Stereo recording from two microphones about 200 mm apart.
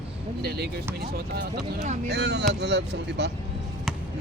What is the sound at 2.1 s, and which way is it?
Speech, 55° right (ahead or behind).